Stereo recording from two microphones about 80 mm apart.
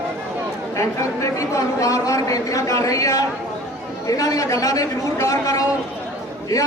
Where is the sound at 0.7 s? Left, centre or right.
Left.